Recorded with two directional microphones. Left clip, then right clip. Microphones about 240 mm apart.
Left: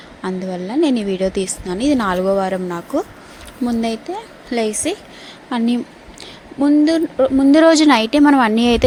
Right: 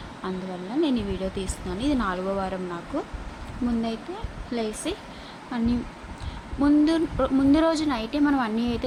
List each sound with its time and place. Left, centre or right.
0.2 s a woman's voice: left
4.5 s a woman's voice: left